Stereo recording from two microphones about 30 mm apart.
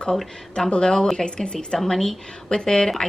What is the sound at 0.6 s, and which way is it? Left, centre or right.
Speech, left.